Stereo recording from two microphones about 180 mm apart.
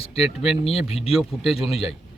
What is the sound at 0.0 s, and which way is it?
Speech, 35° left (ahead or behind).